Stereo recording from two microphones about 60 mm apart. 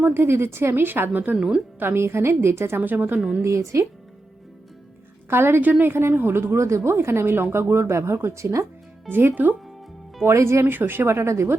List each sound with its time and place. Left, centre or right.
0.0 s a woman's voice: right
1.4 s a woman's voice: centre
1.8 s a woman's voice: right
2.8 s a woman's voice: right
3.4 s a woman's voice: right
5.3 s a woman's voice: right
9.0 s a woman's voice: right
10.2 s a woman's voice: right
10.7 s a woman's voice: right